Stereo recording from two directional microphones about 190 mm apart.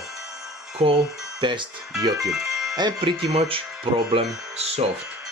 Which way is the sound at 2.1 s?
Centre (ahead or behind).